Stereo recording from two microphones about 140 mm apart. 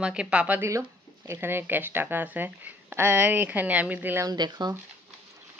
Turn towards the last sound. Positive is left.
turn(degrees=-30)  # may be behind; listen again after turning